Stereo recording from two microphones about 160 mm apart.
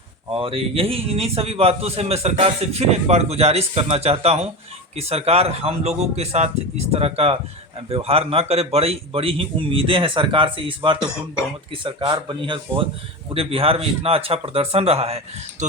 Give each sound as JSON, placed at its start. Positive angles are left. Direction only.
{"t": 0.3, "sound": "a man's voice", "side_deg": -35}